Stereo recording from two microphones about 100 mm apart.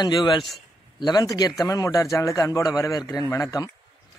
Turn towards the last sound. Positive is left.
turn(degrees=35)  # may be behind; listen again after turning